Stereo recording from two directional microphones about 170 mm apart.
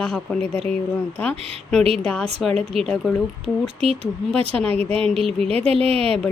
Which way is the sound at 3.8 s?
35° right (ahead or behind).